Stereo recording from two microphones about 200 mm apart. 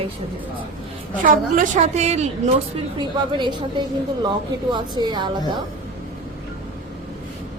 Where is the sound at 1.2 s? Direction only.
40° right (ahead or behind).